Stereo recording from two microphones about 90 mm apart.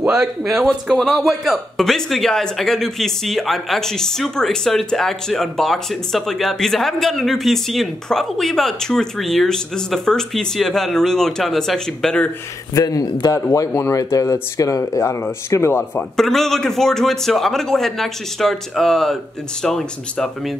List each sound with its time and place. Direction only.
0.0 s a man's voice: 5° right (ahead or behind)
12.7 s speech: 45° left (ahead or behind)
16.0 s a man's voice: 5° left (ahead or behind)